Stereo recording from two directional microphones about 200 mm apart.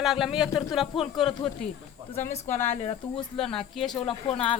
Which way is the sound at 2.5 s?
10° left (ahead or behind).